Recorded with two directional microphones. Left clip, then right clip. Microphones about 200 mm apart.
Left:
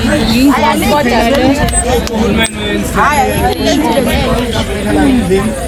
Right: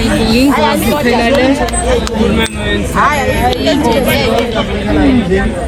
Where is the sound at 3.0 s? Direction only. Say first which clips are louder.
Left 2 dB; 25° right (ahead or behind).